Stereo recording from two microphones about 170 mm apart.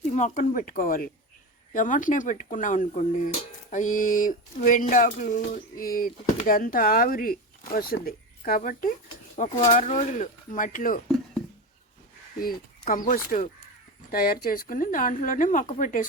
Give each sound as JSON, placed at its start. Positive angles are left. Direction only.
{"t": 0.1, "sound": "speech", "side_deg": 45}
{"t": 12.4, "sound": "speech", "side_deg": 55}